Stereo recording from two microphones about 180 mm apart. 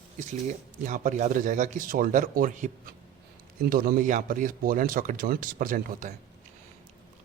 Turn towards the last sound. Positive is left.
turn(degrees=-50)  # may be behind; listen again after turning